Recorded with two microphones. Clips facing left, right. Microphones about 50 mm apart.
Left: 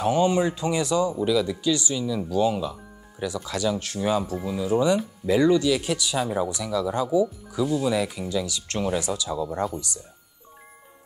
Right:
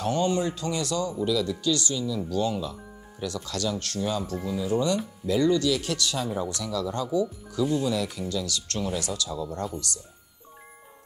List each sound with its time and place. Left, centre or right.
0.0 s speech: centre
7.5 s speech: centre
7.8 s speech: centre